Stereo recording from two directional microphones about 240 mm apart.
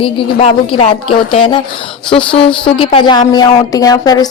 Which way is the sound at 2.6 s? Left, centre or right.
Left.